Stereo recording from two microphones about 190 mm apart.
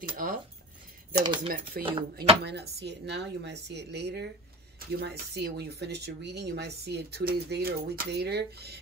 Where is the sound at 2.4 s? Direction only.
60° right (ahead or behind).